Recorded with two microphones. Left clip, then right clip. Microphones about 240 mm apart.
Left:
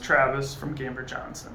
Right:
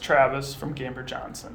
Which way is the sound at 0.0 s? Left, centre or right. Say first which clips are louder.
Right 1 dB; right.